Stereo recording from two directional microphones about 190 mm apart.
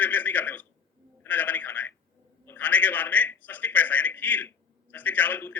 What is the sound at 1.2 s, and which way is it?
Telephone, 10° left (ahead or behind).